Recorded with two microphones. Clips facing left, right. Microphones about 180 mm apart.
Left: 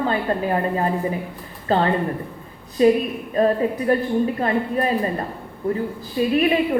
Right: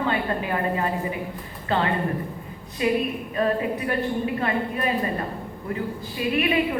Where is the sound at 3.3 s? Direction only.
35° left (ahead or behind).